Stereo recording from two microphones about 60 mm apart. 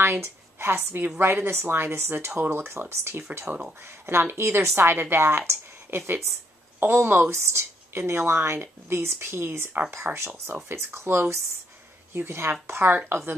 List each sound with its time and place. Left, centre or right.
0.0 s a woman's voice: right
5.5 s a sound: right
6.8 s a woman's voice: right